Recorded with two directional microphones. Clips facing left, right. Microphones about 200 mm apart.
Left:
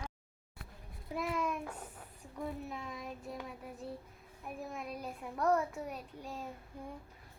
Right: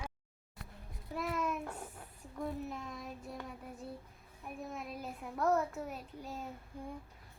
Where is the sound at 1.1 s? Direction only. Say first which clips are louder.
Left 1 dB; 5° left (ahead or behind).